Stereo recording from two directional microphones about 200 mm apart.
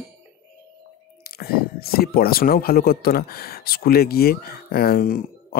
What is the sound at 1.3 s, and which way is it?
Speech, 50° left (ahead or behind).